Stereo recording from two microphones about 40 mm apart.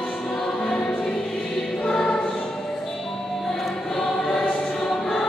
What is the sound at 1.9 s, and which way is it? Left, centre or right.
Choir, centre.